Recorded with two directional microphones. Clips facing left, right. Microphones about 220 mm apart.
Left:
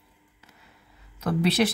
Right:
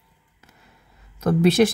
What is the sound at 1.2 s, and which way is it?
Speech, 45° right (ahead or behind).